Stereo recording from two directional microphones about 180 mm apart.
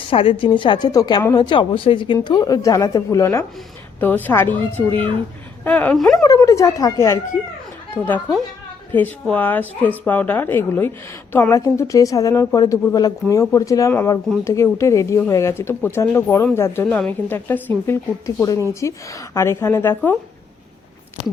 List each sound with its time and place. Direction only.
0.1 s a woman's voice: 30° left (ahead or behind); by 6.2 s centre (ahead or behind)
6.2 s speech: 20° left (ahead or behind)
8.9 s a woman's voice: 10° left (ahead or behind)